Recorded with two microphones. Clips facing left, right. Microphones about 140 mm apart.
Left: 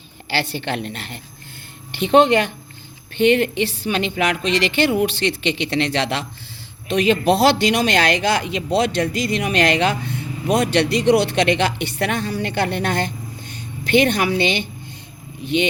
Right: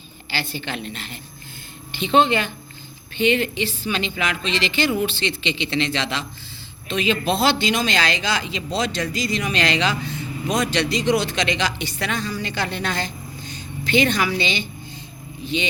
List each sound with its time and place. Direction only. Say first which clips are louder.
0.3 s a woman's voice: left 5 dB; 65° left (ahead or behind)